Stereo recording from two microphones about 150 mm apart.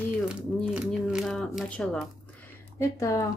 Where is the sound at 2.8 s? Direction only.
20° left (ahead or behind).